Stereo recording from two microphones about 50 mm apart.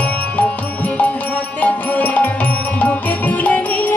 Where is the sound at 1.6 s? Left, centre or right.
Left.